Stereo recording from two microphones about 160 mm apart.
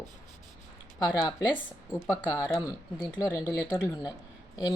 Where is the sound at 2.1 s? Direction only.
20° left (ahead or behind).